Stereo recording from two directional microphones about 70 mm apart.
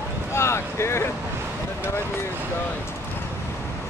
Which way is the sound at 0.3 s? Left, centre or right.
Left.